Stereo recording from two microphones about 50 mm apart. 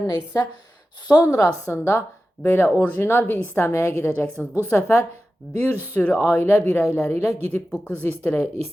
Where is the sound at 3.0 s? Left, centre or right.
Left.